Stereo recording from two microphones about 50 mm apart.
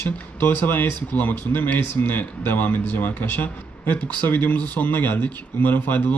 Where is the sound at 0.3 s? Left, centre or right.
Left.